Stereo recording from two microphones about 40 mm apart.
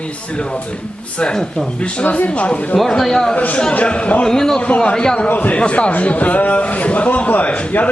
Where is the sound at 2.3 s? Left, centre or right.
Left.